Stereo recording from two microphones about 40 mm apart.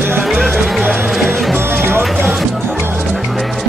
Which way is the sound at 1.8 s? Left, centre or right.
Right.